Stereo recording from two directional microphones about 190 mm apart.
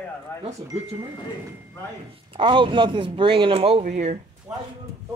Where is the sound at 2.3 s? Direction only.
25° right (ahead or behind).